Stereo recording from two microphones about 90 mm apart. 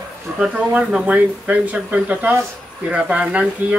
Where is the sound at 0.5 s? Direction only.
15° right (ahead or behind).